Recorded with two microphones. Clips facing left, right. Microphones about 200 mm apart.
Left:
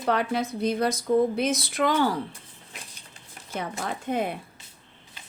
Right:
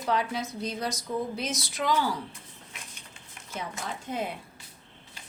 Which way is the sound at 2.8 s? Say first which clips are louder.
Even; 35° left (ahead or behind).